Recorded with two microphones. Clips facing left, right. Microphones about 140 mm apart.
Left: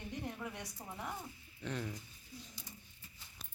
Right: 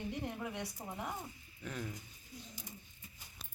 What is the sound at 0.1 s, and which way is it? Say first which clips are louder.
A woman's voice: right 3 dB; 15° right (ahead or behind).